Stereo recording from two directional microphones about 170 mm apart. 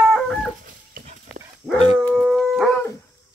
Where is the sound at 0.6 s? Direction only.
50° right (ahead or behind).